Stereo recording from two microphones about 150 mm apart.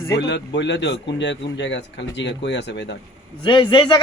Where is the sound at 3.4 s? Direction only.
35° left (ahead or behind).